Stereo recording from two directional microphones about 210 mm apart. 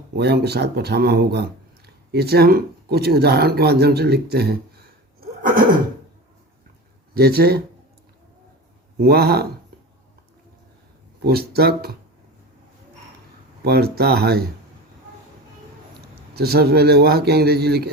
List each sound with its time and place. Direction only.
0.1 s speech: 50° right (ahead or behind)
7.1 s speech: 45° right (ahead or behind)
9.0 s speech: 50° right (ahead or behind)
11.2 s speech: 50° right (ahead or behind)
13.7 s speech: 50° right (ahead or behind)
16.4 s speech: 50° right (ahead or behind)